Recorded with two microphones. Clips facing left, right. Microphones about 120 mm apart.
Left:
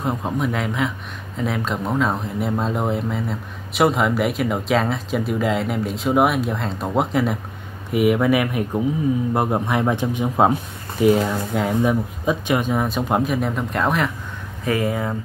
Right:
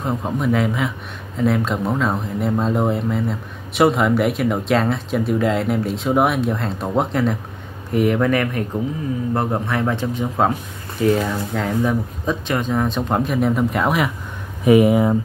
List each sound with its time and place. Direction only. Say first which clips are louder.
0.0 s a man's voice: right 1 dB; centre (ahead or behind)
14.6 s speech: right 9 dB; 15° right (ahead or behind)